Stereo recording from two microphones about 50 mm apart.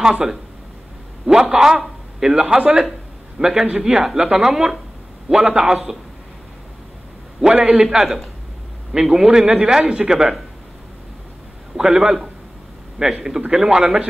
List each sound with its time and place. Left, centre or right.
0.0 s a woman's voice: centre
2.4 s speech: right
3.3 s a man's voice: centre
7.5 s speech: right
7.9 s a woman's voice: centre
11.7 s a woman's voice: centre